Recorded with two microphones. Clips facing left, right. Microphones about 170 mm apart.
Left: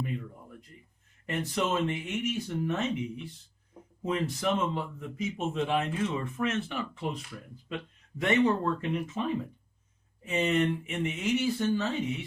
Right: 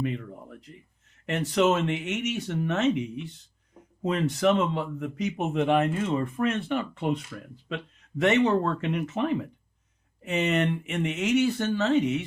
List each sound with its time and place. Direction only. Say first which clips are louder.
1.3 s speech: right 7 dB; 75° right (ahead or behind)
4.0 s speech: right 6 dB; 75° right (ahead or behind)
8.2 s speech: right 3 dB; 75° right (ahead or behind)